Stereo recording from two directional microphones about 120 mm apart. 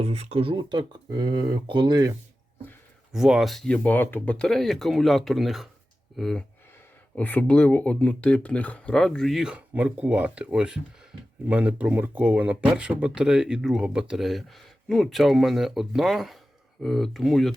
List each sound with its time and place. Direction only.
0.0 s speech: 60° right (ahead or behind); by 2.1 s 35° right (ahead or behind)
3.1 s speech: 5° right (ahead or behind)
7.2 s speech: 15° left (ahead or behind)